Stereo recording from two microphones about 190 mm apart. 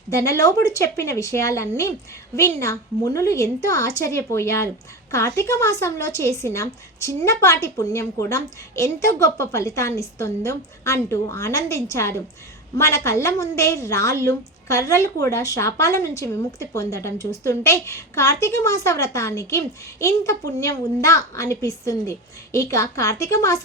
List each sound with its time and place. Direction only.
0.1 s a woman's voice: 15° left (ahead or behind)